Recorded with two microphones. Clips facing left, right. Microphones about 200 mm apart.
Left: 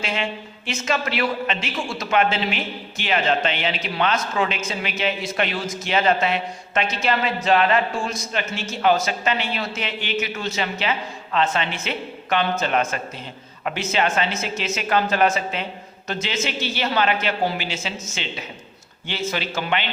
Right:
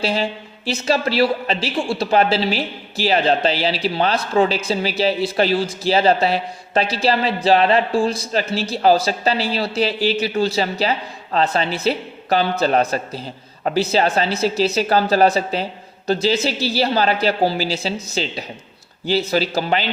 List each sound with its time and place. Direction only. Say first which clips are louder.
0.0 s a man's voice: right 5 dB; 35° right (ahead or behind)